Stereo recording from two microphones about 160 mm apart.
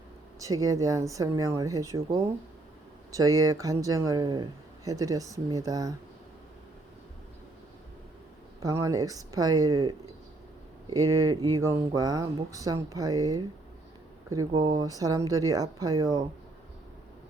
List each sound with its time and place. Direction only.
0.3 s speech: 20° right (ahead or behind)
8.6 s speech: 20° right (ahead or behind)